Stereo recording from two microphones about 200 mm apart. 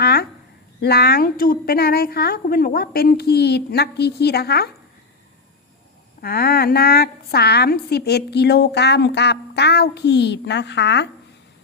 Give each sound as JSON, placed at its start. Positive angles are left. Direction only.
{"t": 0.0, "sound": "a sound", "side_deg": 50}
{"t": 0.8, "sound": "a woman's voice", "side_deg": 50}
{"t": 6.2, "sound": "a woman's voice", "side_deg": 50}